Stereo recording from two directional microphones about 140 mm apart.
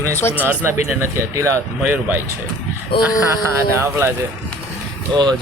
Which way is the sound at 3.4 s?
20° right (ahead or behind).